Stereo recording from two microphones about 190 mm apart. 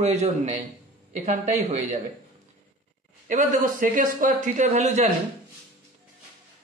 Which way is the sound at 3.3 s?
40° right (ahead or behind).